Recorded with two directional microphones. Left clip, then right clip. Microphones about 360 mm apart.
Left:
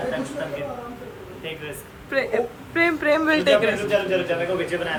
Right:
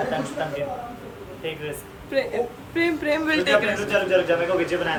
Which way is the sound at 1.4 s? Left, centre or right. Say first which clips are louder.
Right 3 dB; centre.